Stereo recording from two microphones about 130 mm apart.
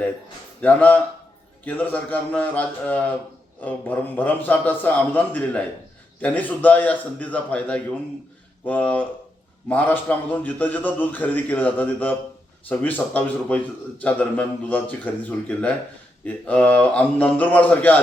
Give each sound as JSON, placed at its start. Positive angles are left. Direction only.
{"t": 0.6, "sound": "a man's voice", "side_deg": 10}